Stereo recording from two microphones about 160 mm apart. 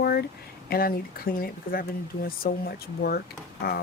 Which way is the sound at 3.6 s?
80° left.